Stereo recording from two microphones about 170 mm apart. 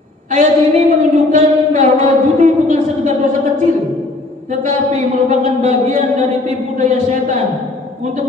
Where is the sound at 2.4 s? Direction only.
45° right (ahead or behind).